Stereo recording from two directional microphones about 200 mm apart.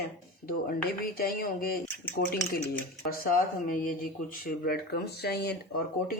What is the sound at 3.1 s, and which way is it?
Speech, 45° left (ahead or behind).